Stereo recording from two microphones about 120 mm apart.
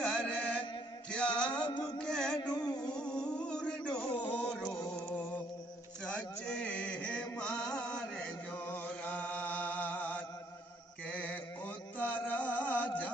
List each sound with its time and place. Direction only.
0.0 s music: 10° left (ahead or behind)
1.1 s a sound: 10° left (ahead or behind)
1.6 s music: 40° left (ahead or behind)
2.0 s music: 5° left (ahead or behind)
2.4 s music: 30° left (ahead or behind)
2.8 s music: 5° left (ahead or behind)
4.1 s music: 40° left (ahead or behind)
4.4 s music: 10° left (ahead or behind)
6.0 s a sound: 10° left (ahead or behind)
11.1 s mantra: 10° left (ahead or behind)
12.0 s music: 15° left (ahead or behind)